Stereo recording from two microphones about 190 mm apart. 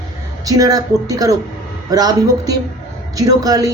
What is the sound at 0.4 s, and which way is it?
Speech, 20° right (ahead or behind).